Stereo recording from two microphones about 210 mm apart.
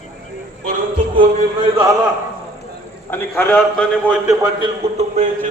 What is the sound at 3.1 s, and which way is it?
Speech, 10° left (ahead or behind).